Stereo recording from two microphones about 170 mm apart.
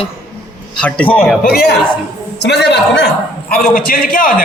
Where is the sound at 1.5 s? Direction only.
65° left (ahead or behind).